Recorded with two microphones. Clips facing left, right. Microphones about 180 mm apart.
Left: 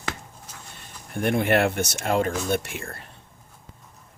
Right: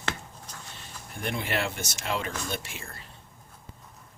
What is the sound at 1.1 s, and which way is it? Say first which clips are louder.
Speech: left 10 dB; 55° left (ahead or behind).